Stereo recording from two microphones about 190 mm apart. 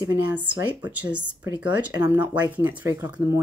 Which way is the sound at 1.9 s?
20° right (ahead or behind).